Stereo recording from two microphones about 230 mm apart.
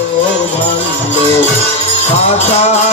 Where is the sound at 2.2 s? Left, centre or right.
Left.